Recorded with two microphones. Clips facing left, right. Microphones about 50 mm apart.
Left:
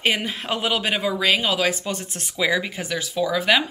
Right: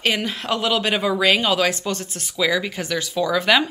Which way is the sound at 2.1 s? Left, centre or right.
Left.